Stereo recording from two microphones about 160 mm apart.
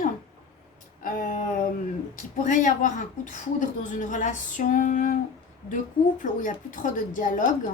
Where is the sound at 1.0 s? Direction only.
60° left (ahead or behind).